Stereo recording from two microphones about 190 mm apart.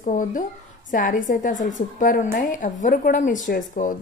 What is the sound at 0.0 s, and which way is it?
A woman's voice, 40° left (ahead or behind).